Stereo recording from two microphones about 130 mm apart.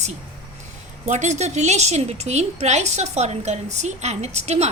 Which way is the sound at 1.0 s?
65° right (ahead or behind).